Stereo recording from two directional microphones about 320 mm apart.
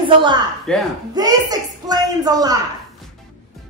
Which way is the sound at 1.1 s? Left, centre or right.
Centre.